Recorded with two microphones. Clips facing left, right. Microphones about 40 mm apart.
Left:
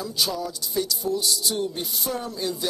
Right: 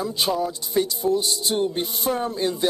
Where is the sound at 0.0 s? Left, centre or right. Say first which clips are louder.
Right 4 dB; right.